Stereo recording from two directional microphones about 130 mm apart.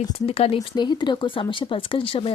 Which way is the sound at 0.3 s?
50° left (ahead or behind).